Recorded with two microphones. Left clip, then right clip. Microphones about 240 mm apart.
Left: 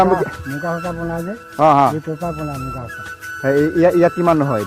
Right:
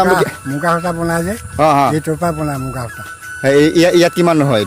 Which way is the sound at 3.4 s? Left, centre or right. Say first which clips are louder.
Right 4 dB; centre.